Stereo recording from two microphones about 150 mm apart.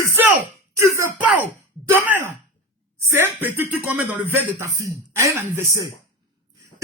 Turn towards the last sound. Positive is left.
turn(degrees=-20)  # may be behind; listen again after turning